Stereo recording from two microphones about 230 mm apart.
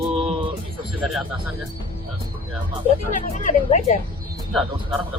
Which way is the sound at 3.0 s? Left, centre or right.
Left.